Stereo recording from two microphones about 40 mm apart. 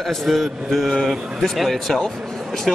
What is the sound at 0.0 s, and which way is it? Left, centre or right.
Speech, centre.